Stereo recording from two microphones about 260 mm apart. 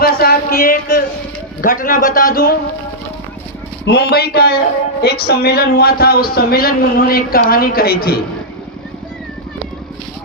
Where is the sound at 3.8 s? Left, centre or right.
Left.